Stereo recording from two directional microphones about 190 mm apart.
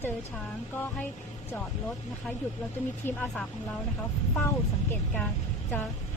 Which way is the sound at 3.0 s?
10° left (ahead or behind).